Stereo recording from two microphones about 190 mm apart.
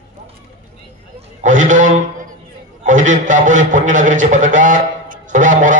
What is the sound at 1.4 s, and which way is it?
A man's voice, 40° right (ahead or behind).